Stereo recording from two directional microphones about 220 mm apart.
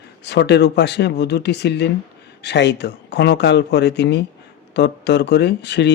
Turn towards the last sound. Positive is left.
turn(degrees=50)  # may be behind; listen again after turning